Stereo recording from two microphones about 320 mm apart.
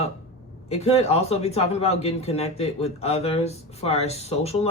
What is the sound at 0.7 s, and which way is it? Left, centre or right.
Speech, centre.